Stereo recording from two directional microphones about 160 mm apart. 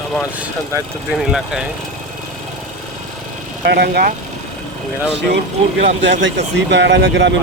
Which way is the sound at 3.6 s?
85° right.